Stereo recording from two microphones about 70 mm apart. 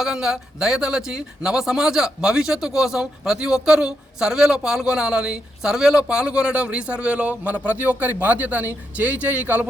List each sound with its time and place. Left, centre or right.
0.0 s speech: centre